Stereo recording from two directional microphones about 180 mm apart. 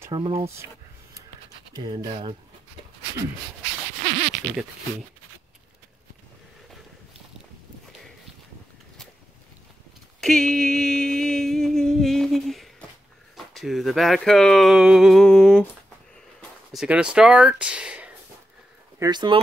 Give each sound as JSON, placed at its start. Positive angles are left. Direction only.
{"t": 0.1, "sound": "speech", "side_deg": -25}
{"t": 1.7, "sound": "speech", "side_deg": -25}
{"t": 10.2, "sound": "a sound", "side_deg": 5}
{"t": 13.5, "sound": "speech", "side_deg": 0}
{"t": 16.3, "sound": "a sound", "side_deg": 0}
{"t": 18.9, "sound": "speech", "side_deg": -25}